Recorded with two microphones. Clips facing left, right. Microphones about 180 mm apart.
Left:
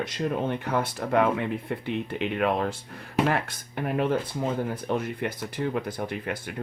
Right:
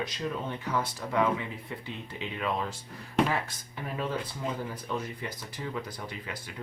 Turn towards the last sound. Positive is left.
turn(degrees=60)  # may be behind; listen again after turning